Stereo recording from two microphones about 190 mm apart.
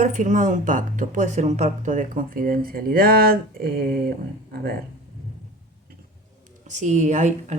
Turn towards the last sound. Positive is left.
turn(degrees=-40)  # may be behind; listen again after turning